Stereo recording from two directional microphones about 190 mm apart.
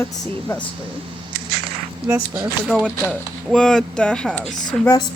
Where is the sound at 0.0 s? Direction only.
10° left (ahead or behind).